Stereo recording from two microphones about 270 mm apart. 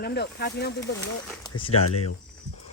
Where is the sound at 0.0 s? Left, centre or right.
Left.